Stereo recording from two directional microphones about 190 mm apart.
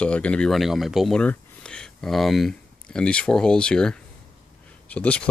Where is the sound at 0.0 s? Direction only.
5° left (ahead or behind).